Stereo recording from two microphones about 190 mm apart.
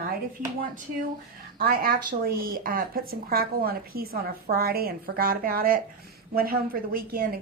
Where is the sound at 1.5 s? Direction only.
50° right (ahead or behind).